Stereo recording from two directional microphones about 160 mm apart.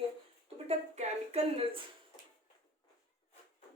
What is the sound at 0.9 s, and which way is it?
Music, 45° right (ahead or behind).